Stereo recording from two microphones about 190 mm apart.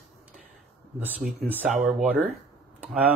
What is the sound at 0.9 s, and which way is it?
Speech, 10° right (ahead or behind).